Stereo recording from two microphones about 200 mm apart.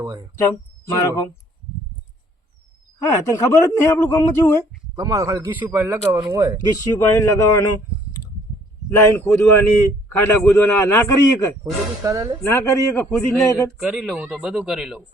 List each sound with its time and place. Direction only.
0.3 s speech: 15° left (ahead or behind)
3.0 s speech: 15° left (ahead or behind)
4.9 s speech: 15° right (ahead or behind)
6.7 s speech: 15° left (ahead or behind)
9.0 s speech: 10° left (ahead or behind)
11.6 s speech: 15° right (ahead or behind)
12.4 s speech: 15° left (ahead or behind); by 15.0 s centre (ahead or behind)